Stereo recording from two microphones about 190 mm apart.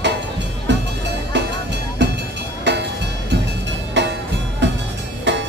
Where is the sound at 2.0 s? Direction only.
65° right (ahead or behind).